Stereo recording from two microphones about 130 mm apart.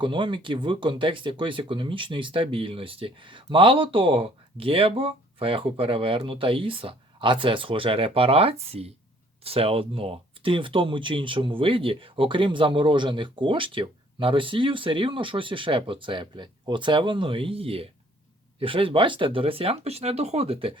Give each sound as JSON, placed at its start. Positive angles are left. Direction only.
{"t": 0.0, "sound": "speech", "side_deg": -40}